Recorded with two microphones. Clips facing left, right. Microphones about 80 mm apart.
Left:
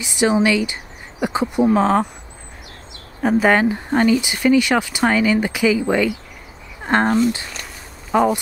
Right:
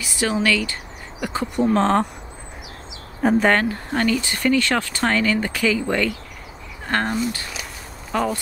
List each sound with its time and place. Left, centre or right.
0.0 s speech: left